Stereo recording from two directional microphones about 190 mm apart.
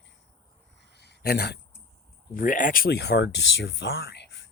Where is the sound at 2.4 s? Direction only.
45° left (ahead or behind); by 4.5 s 65° left (ahead or behind).